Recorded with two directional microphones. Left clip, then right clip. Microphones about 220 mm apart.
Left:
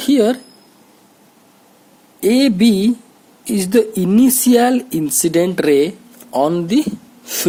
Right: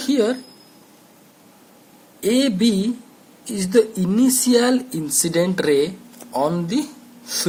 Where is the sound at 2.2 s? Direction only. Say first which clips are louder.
Left 5 dB; 45° left (ahead or behind).